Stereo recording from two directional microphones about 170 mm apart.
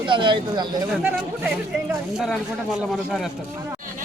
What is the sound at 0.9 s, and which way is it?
Speech, 5° right (ahead or behind).